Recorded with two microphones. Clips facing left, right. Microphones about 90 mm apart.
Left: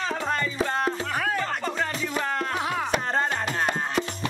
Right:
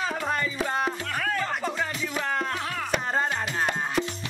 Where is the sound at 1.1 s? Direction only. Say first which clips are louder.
Left 2 dB; 15° left (ahead or behind).